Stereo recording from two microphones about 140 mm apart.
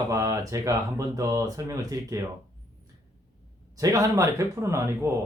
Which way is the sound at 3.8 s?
25° right (ahead or behind).